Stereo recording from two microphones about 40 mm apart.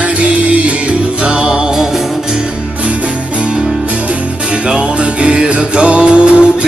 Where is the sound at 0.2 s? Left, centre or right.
Right.